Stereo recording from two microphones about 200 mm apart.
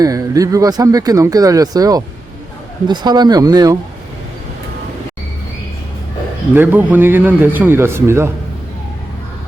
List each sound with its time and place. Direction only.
0.0 s speech: 15° right (ahead or behind)
6.5 s speech: 10° right (ahead or behind)